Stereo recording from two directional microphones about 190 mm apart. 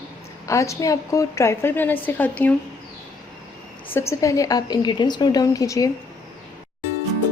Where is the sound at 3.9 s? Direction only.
15° left (ahead or behind).